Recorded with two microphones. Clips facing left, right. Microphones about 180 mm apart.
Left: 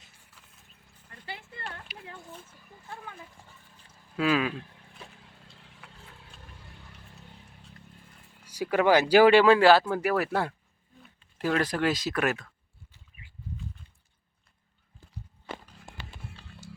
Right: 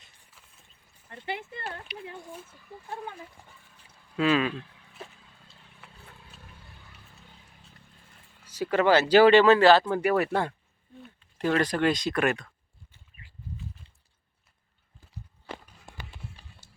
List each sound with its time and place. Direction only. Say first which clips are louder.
1.1 s a sound: right 8 dB; 20° right (ahead or behind)
1.9 s speech: right 7 dB; 5° left (ahead or behind)
4.2 s speech: right 2 dB; 5° left (ahead or behind)
8.4 s speech: even; 10° left (ahead or behind)